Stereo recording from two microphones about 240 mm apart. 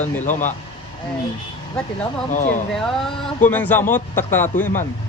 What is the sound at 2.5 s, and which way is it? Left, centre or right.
Speech, centre.